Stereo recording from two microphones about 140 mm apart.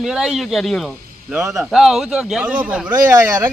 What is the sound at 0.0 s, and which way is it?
A man's voice, centre (ahead or behind).